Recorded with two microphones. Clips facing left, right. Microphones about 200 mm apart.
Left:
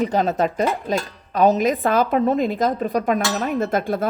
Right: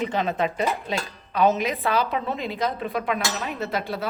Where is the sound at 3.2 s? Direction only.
55° left (ahead or behind).